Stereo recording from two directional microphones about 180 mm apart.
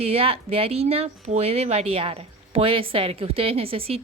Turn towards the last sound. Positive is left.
turn(degrees=-30)  # may be behind; listen again after turning